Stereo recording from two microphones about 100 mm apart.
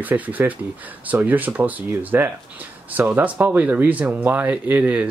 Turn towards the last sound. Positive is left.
turn(degrees=-15)  # may be behind; listen again after turning